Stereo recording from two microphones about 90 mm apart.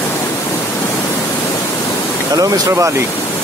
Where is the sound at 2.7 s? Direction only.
30° right (ahead or behind).